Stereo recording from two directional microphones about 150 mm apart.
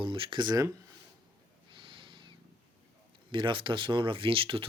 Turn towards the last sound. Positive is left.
turn(degrees=-35)  # may be behind; listen again after turning